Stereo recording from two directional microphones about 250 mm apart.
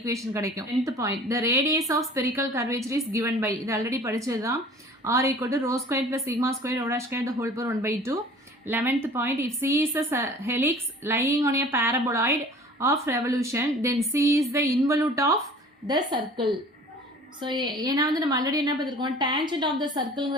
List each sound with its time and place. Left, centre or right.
0.0 s speech: centre